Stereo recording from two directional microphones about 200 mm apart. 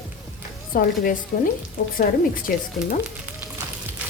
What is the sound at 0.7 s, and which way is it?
A woman's voice, 45° left (ahead or behind).